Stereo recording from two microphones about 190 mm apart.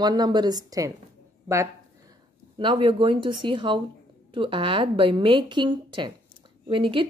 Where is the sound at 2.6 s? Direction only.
25° right (ahead or behind).